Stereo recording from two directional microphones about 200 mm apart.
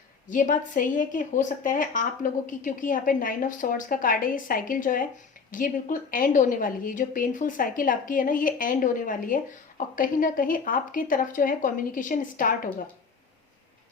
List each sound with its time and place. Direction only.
0.3 s a woman's voice: 40° left (ahead or behind)